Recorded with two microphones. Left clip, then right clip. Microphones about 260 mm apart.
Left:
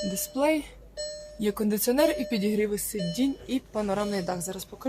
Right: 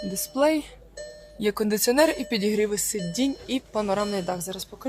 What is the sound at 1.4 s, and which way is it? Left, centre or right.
Speech, right.